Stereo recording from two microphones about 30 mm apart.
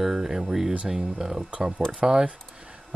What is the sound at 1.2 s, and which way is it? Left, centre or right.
Speech, right.